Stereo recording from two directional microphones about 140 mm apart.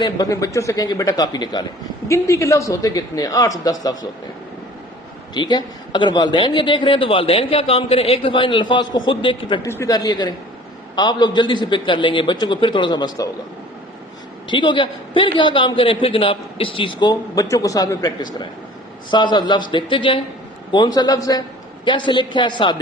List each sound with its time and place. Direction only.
0.0 s a man's voice: 25° left (ahead or behind)
5.3 s a man's voice: 35° left (ahead or behind)
9.6 s a man's voice: 20° left (ahead or behind)
14.5 s a man's voice: 35° left (ahead or behind)